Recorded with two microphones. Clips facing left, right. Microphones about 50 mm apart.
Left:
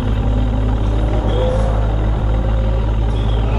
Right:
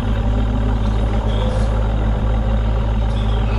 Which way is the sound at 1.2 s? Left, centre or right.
Left.